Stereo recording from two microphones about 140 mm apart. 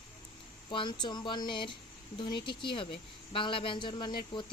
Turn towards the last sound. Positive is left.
turn(degrees=35)  # may be behind; listen again after turning